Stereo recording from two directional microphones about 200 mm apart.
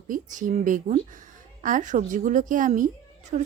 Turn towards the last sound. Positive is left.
turn(degrees=-40)  # may be behind; listen again after turning